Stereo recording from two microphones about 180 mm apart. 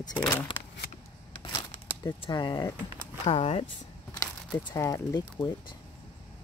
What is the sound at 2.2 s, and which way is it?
Speech, 25° left (ahead or behind).